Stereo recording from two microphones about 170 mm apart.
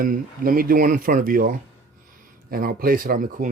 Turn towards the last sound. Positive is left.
turn(degrees=-55)  # may be behind; listen again after turning